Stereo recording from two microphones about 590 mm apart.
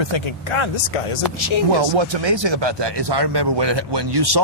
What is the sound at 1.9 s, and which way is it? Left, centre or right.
A man's voice, right.